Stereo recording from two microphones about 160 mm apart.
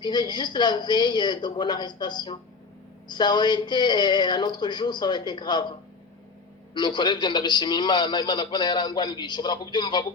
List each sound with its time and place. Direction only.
0.0 s a man's voice: 25° left (ahead or behind)
6.7 s a man's voice: 25° left (ahead or behind)